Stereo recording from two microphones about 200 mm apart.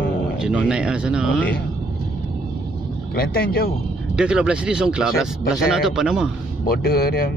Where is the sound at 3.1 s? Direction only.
50° left (ahead or behind).